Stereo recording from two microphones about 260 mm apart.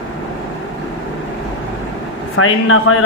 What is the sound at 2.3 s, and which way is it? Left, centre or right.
Speech, left.